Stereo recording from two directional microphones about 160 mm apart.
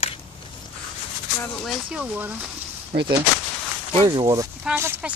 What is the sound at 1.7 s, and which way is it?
Speech, 5° right (ahead or behind).